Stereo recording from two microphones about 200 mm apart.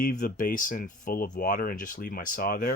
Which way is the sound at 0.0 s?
45° left (ahead or behind).